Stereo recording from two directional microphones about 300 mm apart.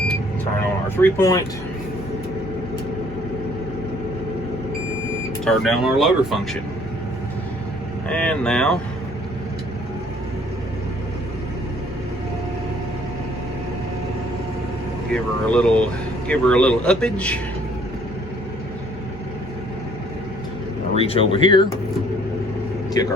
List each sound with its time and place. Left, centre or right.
0.9 s speech: centre
5.5 s speech: centre
8.0 s speech: centre
15.1 s speech: centre
20.9 s speech: centre
23.0 s speech: centre